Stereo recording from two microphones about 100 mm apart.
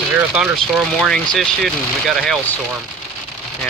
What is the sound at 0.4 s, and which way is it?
Speech, centre (ahead or behind).